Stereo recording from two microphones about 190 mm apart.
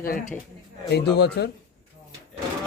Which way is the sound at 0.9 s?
60° left (ahead or behind).